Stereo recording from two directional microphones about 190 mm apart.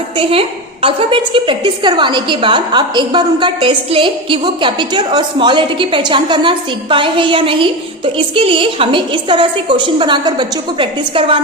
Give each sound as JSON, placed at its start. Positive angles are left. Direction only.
{"t": 0.2, "sound": "a woman's voice", "side_deg": -30}